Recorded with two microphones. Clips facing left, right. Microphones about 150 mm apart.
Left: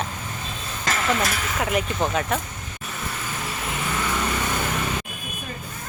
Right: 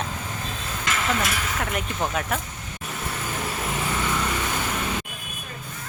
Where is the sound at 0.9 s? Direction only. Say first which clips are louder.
Left 2 dB; 35° left (ahead or behind).